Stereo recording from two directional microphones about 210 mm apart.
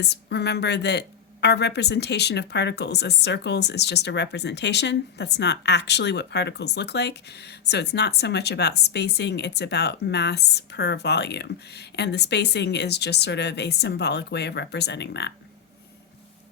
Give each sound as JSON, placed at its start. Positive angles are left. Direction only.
{"t": 0.0, "sound": "speech", "side_deg": 50}